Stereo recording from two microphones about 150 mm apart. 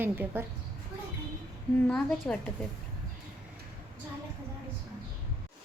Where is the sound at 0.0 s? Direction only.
15° right (ahead or behind).